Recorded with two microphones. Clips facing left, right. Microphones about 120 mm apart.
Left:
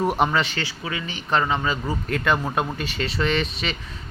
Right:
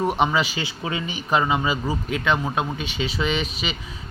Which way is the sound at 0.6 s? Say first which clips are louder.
Right 2 dB; 25° right (ahead or behind).